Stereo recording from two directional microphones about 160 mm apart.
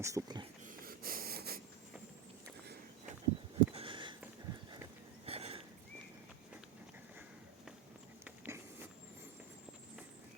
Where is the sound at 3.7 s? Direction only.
30° right (ahead or behind).